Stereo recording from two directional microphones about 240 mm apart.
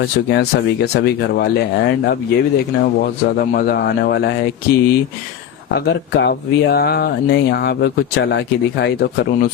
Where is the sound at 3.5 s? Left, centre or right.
Left.